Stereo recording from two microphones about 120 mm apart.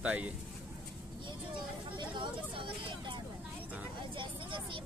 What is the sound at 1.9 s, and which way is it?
Hubbub, 45° right (ahead or behind).